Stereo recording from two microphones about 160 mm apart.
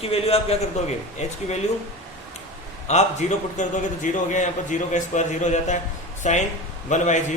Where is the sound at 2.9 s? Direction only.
45° left (ahead or behind).